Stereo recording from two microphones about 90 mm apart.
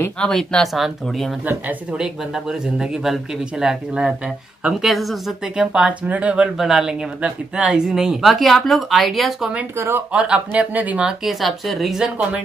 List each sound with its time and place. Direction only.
0.2 s speech: 10° left (ahead or behind)
1.4 s speech: 15° right (ahead or behind); by 9.5 s centre (ahead or behind)
9.8 s speech: 30° right (ahead or behind)
10.1 s speech: 10° right (ahead or behind)